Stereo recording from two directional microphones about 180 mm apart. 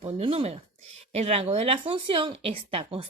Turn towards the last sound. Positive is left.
turn(degrees=-30)  # may be behind; listen again after turning